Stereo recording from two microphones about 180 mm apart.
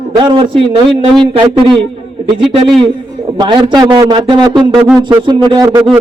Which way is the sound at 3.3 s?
25° right (ahead or behind).